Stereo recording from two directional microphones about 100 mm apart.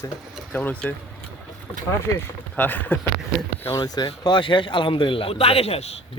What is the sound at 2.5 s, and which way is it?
Speech, 20° left (ahead or behind).